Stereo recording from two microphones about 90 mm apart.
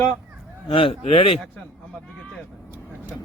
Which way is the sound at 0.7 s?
90° left.